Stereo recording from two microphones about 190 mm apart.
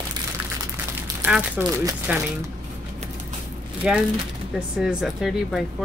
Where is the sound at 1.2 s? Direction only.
5° right (ahead or behind).